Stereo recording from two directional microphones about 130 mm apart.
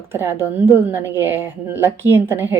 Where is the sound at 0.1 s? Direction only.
20° right (ahead or behind).